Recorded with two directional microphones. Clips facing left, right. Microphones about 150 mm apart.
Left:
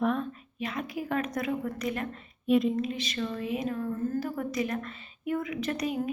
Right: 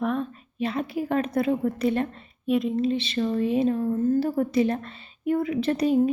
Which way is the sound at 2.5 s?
Centre (ahead or behind).